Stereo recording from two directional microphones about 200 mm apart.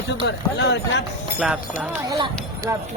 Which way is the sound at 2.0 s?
20° right (ahead or behind).